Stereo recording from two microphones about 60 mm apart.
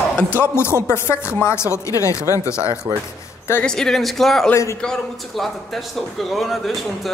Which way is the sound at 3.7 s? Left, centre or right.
Centre.